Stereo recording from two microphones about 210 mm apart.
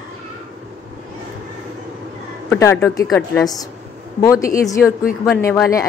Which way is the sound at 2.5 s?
10° left (ahead or behind).